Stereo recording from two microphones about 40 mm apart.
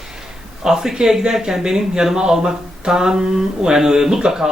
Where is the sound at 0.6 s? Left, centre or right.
Centre.